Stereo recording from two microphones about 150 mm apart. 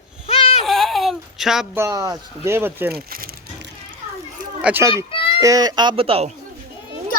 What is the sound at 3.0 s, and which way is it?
Speech, 75° right (ahead or behind).